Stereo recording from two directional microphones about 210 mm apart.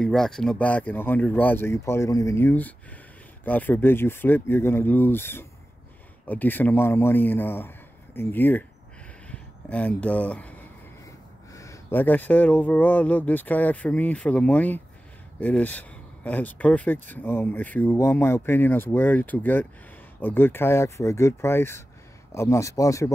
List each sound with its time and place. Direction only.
0.0 s speech: 5° left (ahead or behind)